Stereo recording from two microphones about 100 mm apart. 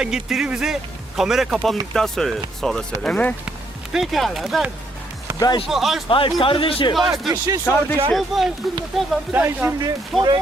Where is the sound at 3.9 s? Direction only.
Centre (ahead or behind).